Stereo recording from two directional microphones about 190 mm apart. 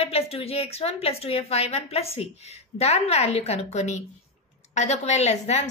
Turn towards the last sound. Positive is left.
turn(degrees=35)  # may be behind; listen again after turning